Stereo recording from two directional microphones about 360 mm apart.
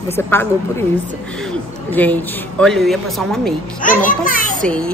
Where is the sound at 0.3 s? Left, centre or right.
Centre.